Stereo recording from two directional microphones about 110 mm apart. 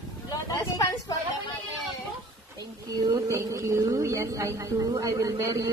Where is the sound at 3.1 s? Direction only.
35° right (ahead or behind).